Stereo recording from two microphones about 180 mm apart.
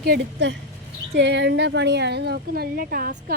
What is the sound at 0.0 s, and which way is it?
A woman's voice, 70° right (ahead or behind).